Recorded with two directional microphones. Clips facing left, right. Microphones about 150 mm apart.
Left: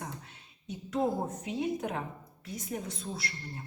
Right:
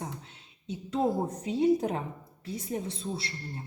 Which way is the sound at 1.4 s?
30° right (ahead or behind).